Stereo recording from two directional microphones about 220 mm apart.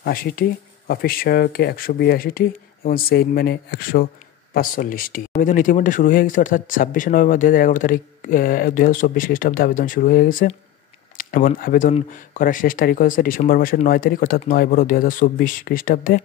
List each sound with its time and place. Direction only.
0.0 s speech: 40° left (ahead or behind)